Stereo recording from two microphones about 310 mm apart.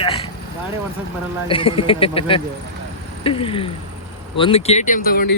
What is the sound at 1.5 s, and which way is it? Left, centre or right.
Speech, centre.